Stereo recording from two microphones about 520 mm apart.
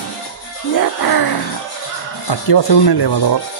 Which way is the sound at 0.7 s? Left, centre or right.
Left.